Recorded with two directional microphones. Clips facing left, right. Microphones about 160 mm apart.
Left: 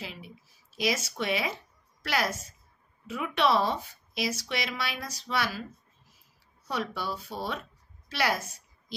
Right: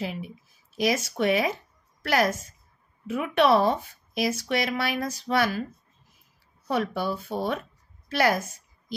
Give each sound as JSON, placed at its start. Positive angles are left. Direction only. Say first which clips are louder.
{"t": 0.0, "sound": "a woman's voice", "louder": "right 9 dB", "side_deg": -55}
{"t": 6.7, "sound": "speech", "louder": "right 6 dB", "side_deg": -55}
{"t": 8.1, "sound": "a sound", "louder": "right 6 dB", "side_deg": -50}